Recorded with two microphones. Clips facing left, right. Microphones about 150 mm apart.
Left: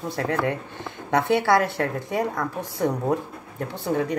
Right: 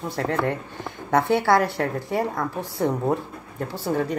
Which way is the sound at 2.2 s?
25° right (ahead or behind).